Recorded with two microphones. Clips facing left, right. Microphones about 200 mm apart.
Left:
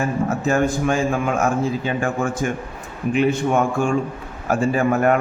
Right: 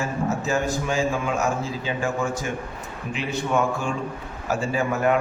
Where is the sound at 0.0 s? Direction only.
55° left (ahead or behind).